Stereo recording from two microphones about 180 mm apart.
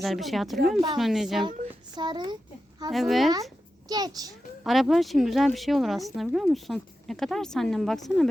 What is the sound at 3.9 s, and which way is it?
Speech, 20° right (ahead or behind).